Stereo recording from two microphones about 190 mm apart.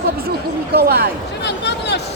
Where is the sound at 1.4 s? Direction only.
65° left (ahead or behind).